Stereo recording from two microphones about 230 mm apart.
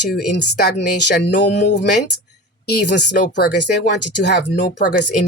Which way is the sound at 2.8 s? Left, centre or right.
Left.